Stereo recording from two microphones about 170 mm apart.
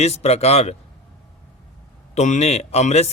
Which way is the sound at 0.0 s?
40° left (ahead or behind).